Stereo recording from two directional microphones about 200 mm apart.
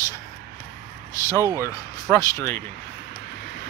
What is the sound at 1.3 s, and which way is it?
Speech, 15° right (ahead or behind).